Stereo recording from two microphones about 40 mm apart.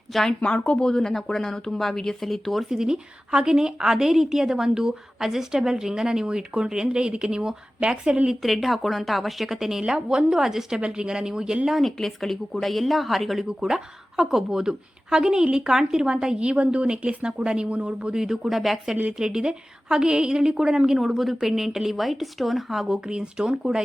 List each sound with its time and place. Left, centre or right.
0.1 s speech: centre
0.4 s speech: left
0.9 s speech: centre
2.6 s a woman's voice: centre
8.3 s a woman's voice: centre
10.8 s speech: right
11.7 s speech: centre
13.7 s a woman's voice: centre; by 18.1 s right
18.1 s a woman's voice: centre
18.4 s speech: centre
19.1 s a woman's voice: centre
22.9 s speech: centre